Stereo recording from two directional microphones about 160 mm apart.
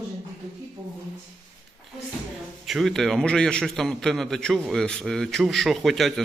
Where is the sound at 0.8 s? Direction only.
25° right (ahead or behind).